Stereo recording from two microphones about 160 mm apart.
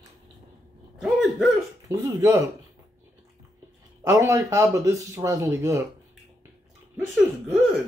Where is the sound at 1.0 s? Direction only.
Centre (ahead or behind).